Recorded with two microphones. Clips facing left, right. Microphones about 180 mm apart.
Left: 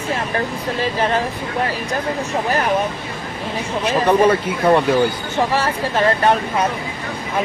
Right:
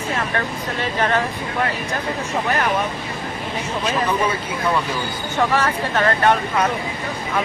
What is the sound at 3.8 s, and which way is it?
Speech, 70° left (ahead or behind).